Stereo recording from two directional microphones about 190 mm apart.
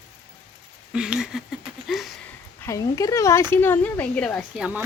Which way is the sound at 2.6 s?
15° left (ahead or behind).